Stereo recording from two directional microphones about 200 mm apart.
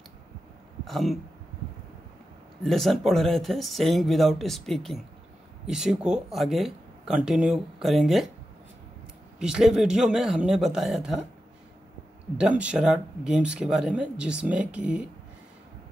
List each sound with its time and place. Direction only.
0.8 s speech: centre (ahead or behind)
2.6 s speech: centre (ahead or behind)
9.4 s speech: 5° right (ahead or behind)
12.4 s speech: 5° right (ahead or behind)